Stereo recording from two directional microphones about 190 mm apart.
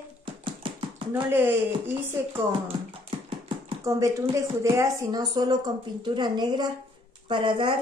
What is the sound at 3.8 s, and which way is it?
Speech, 15° right (ahead or behind).